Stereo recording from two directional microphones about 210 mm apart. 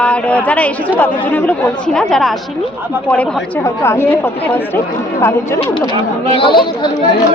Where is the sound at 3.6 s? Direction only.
15° left (ahead or behind).